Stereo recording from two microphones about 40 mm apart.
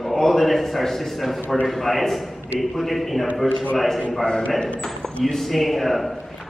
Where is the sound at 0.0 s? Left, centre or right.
Centre.